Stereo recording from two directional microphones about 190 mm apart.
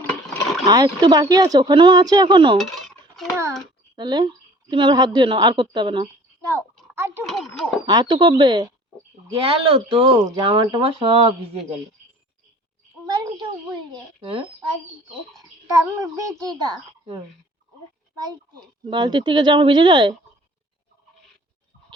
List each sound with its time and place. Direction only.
0.6 s a woman's voice: 20° right (ahead or behind)
2.6 s dishes: centre (ahead or behind)
3.9 s a woman's voice: 25° right (ahead or behind)
6.9 s a sound: 10° right (ahead or behind)
7.3 s a sound: centre (ahead or behind)
7.9 s a woman's voice: 20° right (ahead or behind)
13.9 s speech: 30° right (ahead or behind)
15.4 s a child's voice: 15° right (ahead or behind)
18.9 s a woman's voice: 25° right (ahead or behind)